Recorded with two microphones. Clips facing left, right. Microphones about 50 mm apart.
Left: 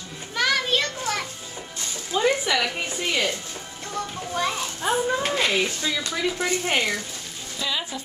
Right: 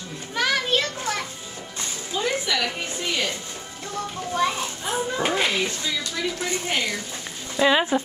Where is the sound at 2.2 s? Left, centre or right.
Centre.